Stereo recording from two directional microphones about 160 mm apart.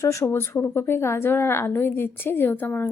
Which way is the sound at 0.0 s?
20° left (ahead or behind).